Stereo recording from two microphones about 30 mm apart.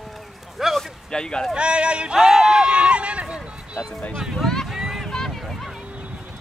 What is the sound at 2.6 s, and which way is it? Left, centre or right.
Run, right.